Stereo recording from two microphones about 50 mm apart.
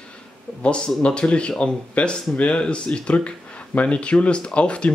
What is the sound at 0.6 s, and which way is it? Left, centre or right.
Speech, centre.